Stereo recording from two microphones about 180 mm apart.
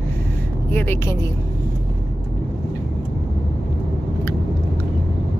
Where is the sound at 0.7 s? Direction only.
10° left (ahead or behind).